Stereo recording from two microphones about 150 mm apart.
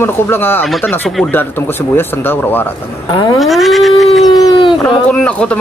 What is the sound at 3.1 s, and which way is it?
Speech, 30° left (ahead or behind).